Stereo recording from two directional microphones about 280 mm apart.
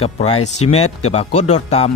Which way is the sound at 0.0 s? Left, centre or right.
Left.